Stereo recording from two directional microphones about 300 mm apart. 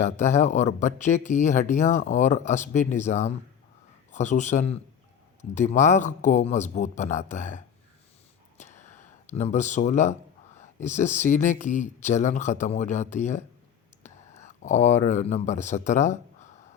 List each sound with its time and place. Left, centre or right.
0.0 s speech: left
8.5 s a sound: left
10.6 s speech: left